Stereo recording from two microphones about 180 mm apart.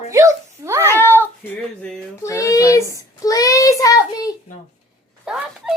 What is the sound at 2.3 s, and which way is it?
A child's voice, 20° left (ahead or behind).